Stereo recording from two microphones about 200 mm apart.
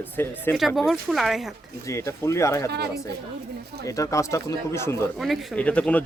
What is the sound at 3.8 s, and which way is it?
Speech, 15° left (ahead or behind).